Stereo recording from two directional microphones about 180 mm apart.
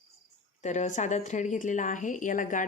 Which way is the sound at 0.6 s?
40° left (ahead or behind).